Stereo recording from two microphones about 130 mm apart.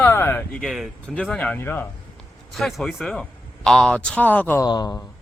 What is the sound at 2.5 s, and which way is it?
A man's voice, centre (ahead or behind).